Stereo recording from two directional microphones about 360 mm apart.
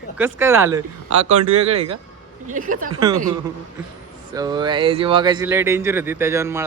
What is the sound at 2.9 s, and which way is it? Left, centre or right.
Speech, centre.